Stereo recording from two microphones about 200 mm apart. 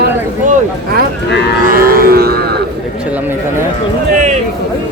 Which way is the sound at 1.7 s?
45° right (ahead or behind).